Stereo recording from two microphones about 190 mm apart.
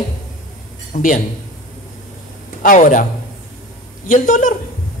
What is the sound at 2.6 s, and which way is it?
Speech, 45° left (ahead or behind).